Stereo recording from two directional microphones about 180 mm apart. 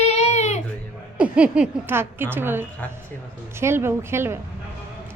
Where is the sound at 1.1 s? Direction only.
5° right (ahead or behind).